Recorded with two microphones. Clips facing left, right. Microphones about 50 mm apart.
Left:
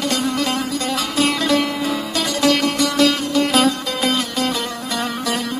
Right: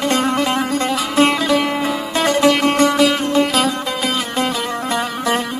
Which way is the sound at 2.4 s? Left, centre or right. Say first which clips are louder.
Right 2 dB; right.